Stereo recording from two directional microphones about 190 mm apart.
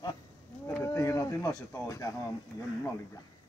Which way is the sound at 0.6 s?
15° left (ahead or behind).